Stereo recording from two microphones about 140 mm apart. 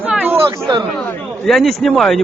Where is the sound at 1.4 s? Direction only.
Centre (ahead or behind).